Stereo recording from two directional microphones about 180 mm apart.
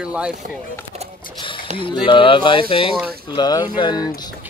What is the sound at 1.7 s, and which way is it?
Speech, 40° right (ahead or behind).